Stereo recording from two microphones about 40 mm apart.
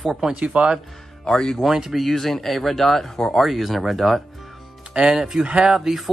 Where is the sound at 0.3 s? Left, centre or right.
Right.